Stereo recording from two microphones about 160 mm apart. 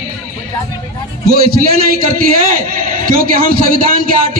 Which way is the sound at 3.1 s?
60° right (ahead or behind).